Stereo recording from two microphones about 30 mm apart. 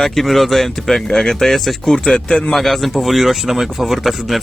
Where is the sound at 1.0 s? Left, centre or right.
Centre.